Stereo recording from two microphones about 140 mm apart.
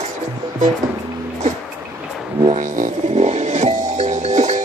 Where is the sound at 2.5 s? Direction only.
60° right (ahead or behind).